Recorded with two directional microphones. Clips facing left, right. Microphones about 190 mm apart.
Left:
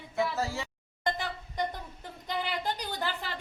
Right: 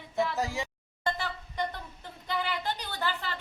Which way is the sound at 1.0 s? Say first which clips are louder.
Even; 15° left (ahead or behind).